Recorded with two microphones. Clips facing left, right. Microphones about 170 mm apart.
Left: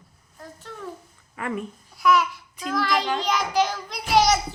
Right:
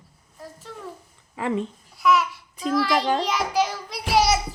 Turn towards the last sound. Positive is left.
turn(degrees=-5)  # may be behind; listen again after turning